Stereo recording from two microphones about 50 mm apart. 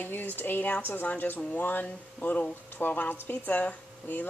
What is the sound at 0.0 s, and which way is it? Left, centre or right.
A woman's voice, left.